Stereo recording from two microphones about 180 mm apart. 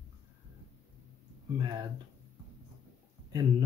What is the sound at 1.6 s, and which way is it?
Speech, 25° right (ahead or behind).